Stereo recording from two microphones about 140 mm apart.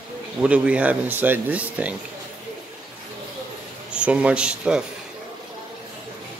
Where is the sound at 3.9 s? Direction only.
10° right (ahead or behind).